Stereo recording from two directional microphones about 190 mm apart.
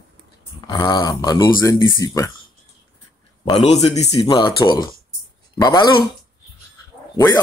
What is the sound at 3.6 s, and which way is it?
Speech, 35° left (ahead or behind).